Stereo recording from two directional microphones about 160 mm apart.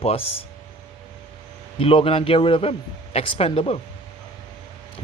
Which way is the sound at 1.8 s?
35° left (ahead or behind).